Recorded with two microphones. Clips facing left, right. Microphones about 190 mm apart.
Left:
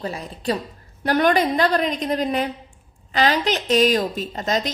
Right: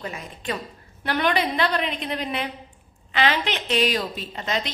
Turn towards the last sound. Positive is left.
turn(degrees=40)  # may be behind; listen again after turning